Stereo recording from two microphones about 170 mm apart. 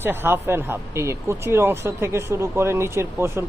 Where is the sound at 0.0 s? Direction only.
15° right (ahead or behind).